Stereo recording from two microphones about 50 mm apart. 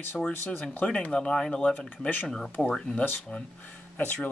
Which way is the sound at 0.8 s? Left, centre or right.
Left.